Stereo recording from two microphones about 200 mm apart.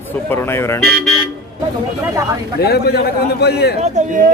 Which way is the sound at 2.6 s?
55° left (ahead or behind).